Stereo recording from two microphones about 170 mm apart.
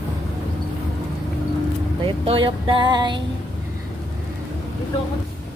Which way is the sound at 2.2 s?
30° right (ahead or behind).